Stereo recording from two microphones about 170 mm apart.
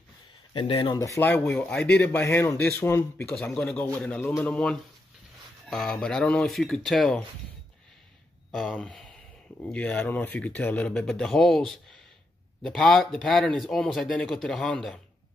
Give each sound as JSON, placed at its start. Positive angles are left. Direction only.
{"t": 0.5, "sound": "speech", "side_deg": 30}
{"t": 0.9, "sound": "a man's voice", "side_deg": 20}
{"t": 8.5, "sound": "a man's voice", "side_deg": 5}